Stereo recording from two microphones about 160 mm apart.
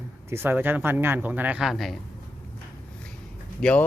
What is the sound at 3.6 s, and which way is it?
Speech, 5° left (ahead or behind).